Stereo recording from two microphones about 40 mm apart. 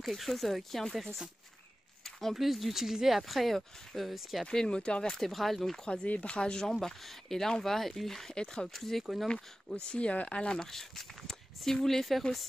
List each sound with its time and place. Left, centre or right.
0.0 s speech: centre
2.0 s a sound: centre
2.3 s speech: centre
4.5 s speech: left
5.1 s speech: centre
5.9 s speech: left
6.6 s speech: centre
9.8 s speech: left
10.6 s speech: centre